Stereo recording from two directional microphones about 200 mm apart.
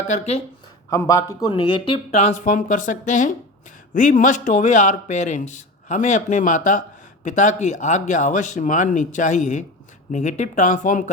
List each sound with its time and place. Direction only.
0.1 s a man's voice: 30° left (ahead or behind)
0.9 s a man's voice: 15° left (ahead or behind); by 11.1 s 40° left (ahead or behind)